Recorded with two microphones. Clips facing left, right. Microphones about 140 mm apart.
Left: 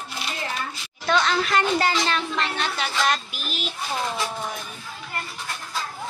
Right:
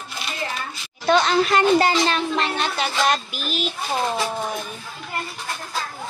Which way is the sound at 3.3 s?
75° right (ahead or behind).